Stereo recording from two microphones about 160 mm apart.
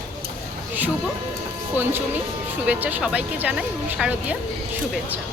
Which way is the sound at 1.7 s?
10° right (ahead or behind).